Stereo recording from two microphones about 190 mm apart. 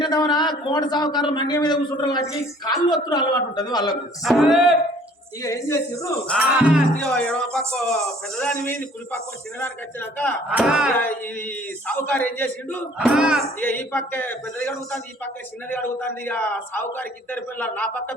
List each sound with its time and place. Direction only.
0.0 s a man's voice: 20° left (ahead or behind)
4.2 s speech: centre (ahead or behind)
5.4 s a man's voice: 15° left (ahead or behind)
6.3 s a man's voice: 5° right (ahead or behind)
10.5 s speech: 5° right (ahead or behind)
10.9 s a man's voice: 10° left (ahead or behind)
13.0 s speech: 5° right (ahead or behind)
13.6 s a man's voice: 10° left (ahead or behind)